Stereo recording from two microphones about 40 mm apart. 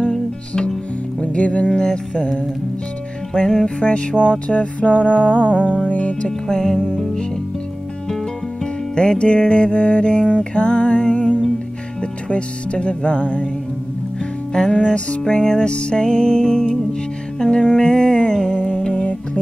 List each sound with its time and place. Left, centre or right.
1.2 s music: left
1.7 s speech: centre
3.3 s speech: centre
3.6 s music: left
6.2 s speech: centre
8.9 s music: left
12.0 s speech: left
14.5 s music: left
17.7 s a sound: left